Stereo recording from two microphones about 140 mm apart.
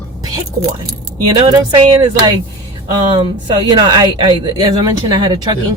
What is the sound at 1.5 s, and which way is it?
Speech, 30° right (ahead or behind).